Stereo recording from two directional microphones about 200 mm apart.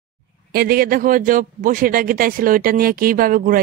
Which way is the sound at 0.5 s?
50° right (ahead or behind).